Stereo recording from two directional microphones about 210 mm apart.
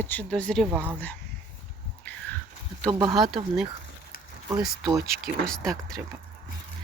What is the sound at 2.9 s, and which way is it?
Speech, 20° right (ahead or behind).